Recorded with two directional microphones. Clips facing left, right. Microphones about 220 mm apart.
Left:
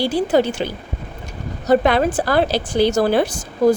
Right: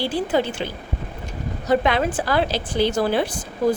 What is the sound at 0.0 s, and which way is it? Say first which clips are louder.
A woman's voice: left 5 dB; 40° left (ahead or behind).